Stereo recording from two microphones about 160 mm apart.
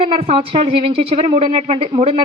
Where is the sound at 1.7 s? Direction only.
35° right (ahead or behind).